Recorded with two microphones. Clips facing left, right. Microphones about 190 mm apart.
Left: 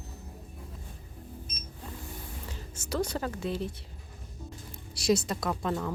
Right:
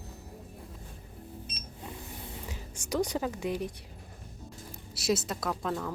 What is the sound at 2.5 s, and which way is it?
A woman's voice, 15° right (ahead or behind).